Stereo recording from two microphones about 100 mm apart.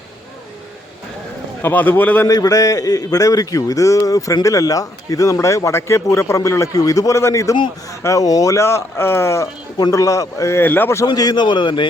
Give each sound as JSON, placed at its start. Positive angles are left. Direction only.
{"t": 1.6, "sound": "a man's voice", "side_deg": 20}
{"t": 2.2, "sound": "a man's voice", "side_deg": 40}
{"t": 9.7, "sound": "a man's voice", "side_deg": 40}
{"t": 11.0, "sound": "a man's voice", "side_deg": 40}